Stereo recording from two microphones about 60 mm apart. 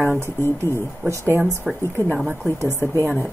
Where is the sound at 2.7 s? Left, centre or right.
Left.